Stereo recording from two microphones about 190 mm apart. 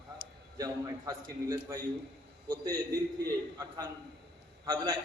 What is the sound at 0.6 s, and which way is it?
A man's voice, 15° right (ahead or behind).